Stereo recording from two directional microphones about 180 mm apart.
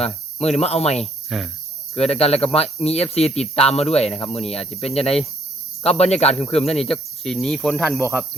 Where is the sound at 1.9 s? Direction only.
35° left (ahead or behind).